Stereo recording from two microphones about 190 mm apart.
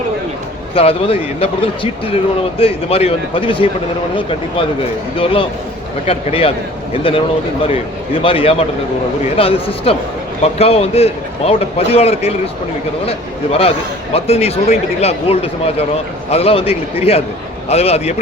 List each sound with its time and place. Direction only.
0.7 s speech: 30° left (ahead or behind)
8.2 s a man's voice: 30° left (ahead or behind)